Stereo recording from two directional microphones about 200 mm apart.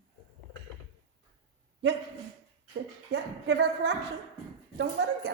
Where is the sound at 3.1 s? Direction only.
60° right (ahead or behind).